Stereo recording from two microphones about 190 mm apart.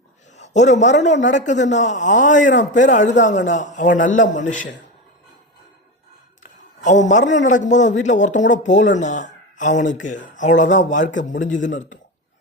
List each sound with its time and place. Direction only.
0.3 s a man's voice: 40° left (ahead or behind)
6.8 s a man's voice: 40° left (ahead or behind)